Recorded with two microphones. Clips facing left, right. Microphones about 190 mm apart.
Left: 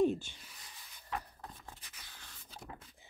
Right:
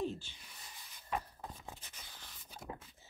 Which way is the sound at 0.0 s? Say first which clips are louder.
Left 9 dB; 55° left (ahead or behind).